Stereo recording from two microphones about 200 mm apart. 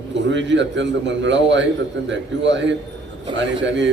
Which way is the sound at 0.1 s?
65° right (ahead or behind).